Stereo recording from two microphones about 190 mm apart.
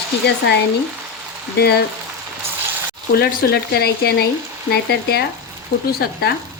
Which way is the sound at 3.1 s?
55° left (ahead or behind).